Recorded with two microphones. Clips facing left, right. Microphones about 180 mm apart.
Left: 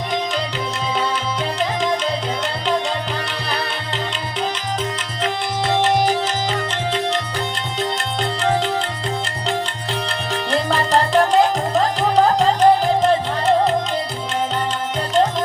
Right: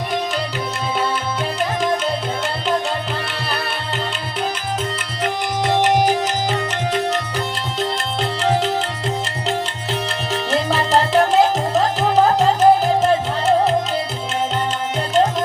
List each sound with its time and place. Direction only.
5.6 s music: 15° right (ahead or behind)
10.3 s tabla: 5° right (ahead or behind)